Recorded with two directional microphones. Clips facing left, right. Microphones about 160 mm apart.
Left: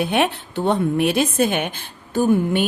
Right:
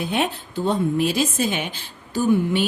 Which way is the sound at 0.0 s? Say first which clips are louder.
Left 4 dB; 70° left (ahead or behind).